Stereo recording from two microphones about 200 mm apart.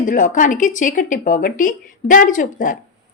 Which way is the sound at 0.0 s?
40° left (ahead or behind).